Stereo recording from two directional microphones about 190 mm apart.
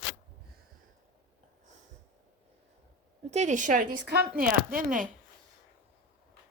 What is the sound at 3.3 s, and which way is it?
Speech, 40° right (ahead or behind).